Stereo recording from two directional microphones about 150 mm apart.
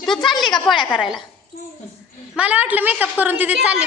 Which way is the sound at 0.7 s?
30° left (ahead or behind).